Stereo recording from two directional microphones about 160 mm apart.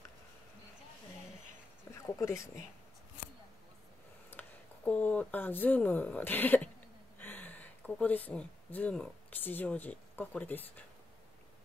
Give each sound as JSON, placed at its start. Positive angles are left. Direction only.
{"t": 1.9, "sound": "speech", "side_deg": 15}
{"t": 4.3, "sound": "speech", "side_deg": 10}